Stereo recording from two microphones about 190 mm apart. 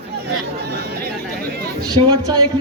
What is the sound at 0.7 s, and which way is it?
Chatter, 60° right (ahead or behind).